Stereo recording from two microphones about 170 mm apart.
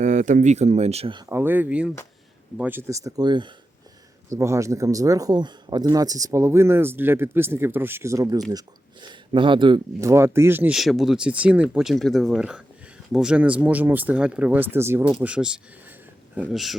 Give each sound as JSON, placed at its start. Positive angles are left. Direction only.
{"t": 0.0, "sound": "speech", "side_deg": -45}
{"t": 1.3, "sound": "speech", "side_deg": -15}
{"t": 10.1, "sound": "speech", "side_deg": -15}